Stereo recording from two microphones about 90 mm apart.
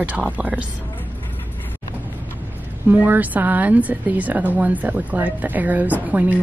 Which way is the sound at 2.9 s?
20° right (ahead or behind).